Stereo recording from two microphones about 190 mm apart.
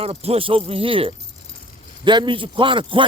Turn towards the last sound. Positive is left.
turn(degrees=-25)  # may be behind; listen again after turning